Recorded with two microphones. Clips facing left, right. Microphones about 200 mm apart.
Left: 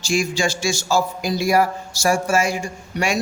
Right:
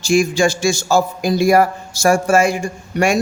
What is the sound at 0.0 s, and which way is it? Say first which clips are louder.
A man's voice: right 7 dB; 50° right (ahead or behind).